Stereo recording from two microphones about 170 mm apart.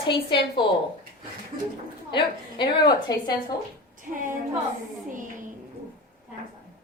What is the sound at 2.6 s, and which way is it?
Speech, 25° left (ahead or behind).